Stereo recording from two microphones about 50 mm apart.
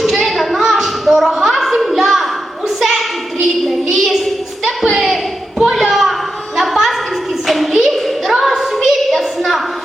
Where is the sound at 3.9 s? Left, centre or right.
Centre.